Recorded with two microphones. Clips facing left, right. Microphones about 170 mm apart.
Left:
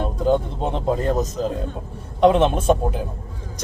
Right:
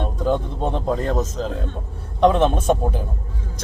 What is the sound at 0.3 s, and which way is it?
Speech, 20° left (ahead or behind).